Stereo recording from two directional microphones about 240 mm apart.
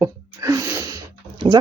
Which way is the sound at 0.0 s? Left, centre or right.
Centre.